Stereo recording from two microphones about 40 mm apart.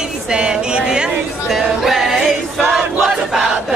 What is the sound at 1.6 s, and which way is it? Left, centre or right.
Choir, centre.